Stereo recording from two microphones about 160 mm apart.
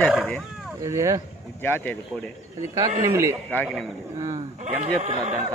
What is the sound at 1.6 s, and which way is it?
Speech, 10° left (ahead or behind).